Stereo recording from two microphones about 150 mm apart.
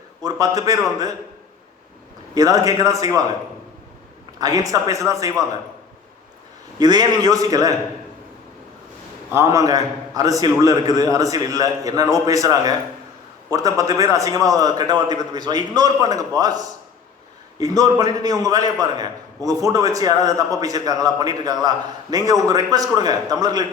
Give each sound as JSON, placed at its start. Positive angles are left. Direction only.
{"t": 0.2, "sound": "a man's voice", "side_deg": -25}
{"t": 2.3, "sound": "a man's voice", "side_deg": -25}
{"t": 4.4, "sound": "a man's voice", "side_deg": -25}
{"t": 6.7, "sound": "a man's voice", "side_deg": -25}
{"t": 9.3, "sound": "a man's voice", "side_deg": -20}